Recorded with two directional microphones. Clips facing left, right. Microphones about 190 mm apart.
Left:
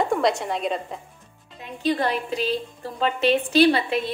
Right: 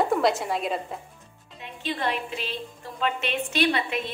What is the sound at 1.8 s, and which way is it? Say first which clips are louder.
A woman's voice: left 6 dB; 40° left (ahead or behind).